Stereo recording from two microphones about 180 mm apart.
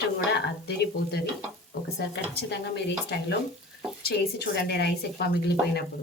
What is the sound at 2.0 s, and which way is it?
Speech, 70° left (ahead or behind).